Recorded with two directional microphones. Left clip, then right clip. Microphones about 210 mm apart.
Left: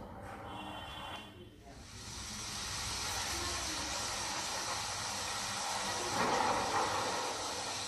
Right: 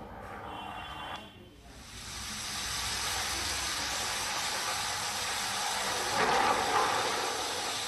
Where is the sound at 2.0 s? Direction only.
50° right (ahead or behind).